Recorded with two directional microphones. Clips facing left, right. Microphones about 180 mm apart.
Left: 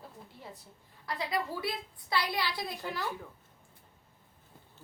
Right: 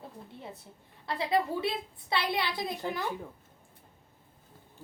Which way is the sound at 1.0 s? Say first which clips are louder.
Right 5 dB; 25° right (ahead or behind).